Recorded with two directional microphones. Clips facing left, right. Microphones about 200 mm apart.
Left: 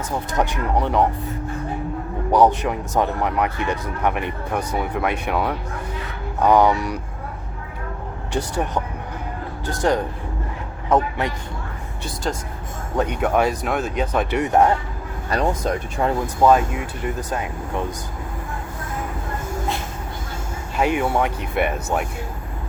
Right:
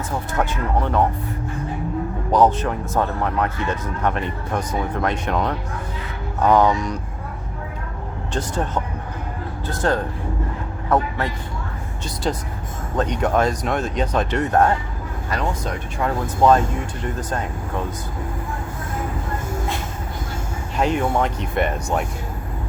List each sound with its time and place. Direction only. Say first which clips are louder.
0.3 s speech: left 1 dB; 15° left (ahead or behind)
2.6 s speech: left 1 dB; 15° left (ahead or behind)
8.3 s a man's voice: left 1 dB; 10° left (ahead or behind)
12.2 s speech: right 2 dB; centre (ahead or behind); by 14.8 s 15° left (ahead or behind)
16.0 s speech: left 2 dB; 30° left (ahead or behind)
16.4 s speech: even; 10° left (ahead or behind)
20.7 s speech: even; 10° left (ahead or behind)